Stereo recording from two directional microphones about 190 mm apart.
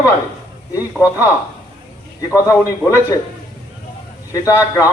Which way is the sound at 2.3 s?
15° left (ahead or behind).